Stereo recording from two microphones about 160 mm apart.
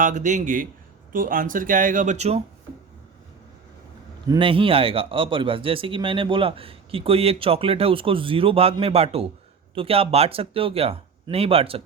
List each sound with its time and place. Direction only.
0.0 s speech: 50° right (ahead or behind)
4.3 s speech: 35° right (ahead or behind)